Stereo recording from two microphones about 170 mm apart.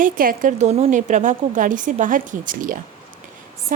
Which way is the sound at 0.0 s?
55° right (ahead or behind).